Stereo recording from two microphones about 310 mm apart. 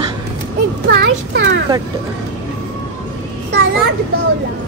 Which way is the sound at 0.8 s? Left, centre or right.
Right.